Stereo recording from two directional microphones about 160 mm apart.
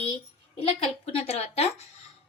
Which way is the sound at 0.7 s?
40° left (ahead or behind).